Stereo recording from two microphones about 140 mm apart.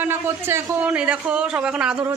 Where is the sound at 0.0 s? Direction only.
15° right (ahead or behind).